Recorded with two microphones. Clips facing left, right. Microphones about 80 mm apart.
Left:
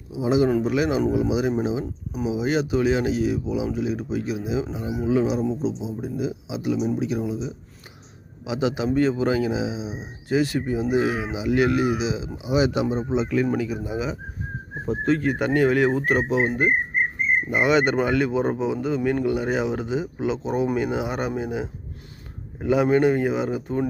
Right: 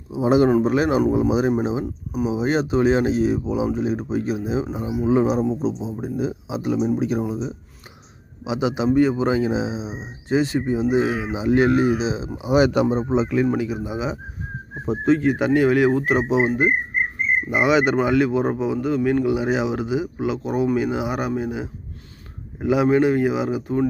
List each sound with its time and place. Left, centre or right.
0.1 s speech: right
0.6 s speech: right
8.4 s speech: right
12.4 s speech: right
13.2 s a man's voice: centre